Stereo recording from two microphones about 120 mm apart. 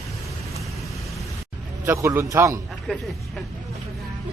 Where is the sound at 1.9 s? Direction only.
20° right (ahead or behind).